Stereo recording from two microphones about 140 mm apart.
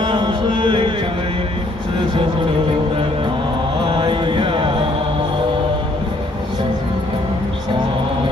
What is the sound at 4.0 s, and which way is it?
Music, 35° right (ahead or behind).